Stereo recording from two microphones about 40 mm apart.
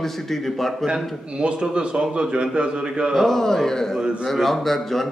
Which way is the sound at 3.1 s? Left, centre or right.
Centre.